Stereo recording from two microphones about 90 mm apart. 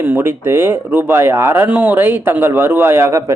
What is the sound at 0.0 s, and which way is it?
Speech, 25° right (ahead or behind).